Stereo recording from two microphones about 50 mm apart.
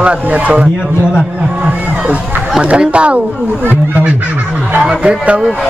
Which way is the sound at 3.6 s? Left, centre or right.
Right.